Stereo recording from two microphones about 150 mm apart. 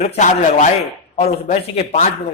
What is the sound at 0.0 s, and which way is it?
Speech, 50° left (ahead or behind).